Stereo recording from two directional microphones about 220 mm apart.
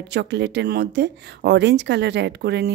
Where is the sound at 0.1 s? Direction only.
55° right (ahead or behind).